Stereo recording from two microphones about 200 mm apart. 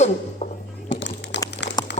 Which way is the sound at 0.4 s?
35° left (ahead or behind).